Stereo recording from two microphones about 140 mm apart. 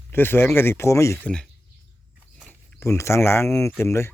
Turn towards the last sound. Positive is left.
turn(degrees=20)  # may be behind; listen again after turning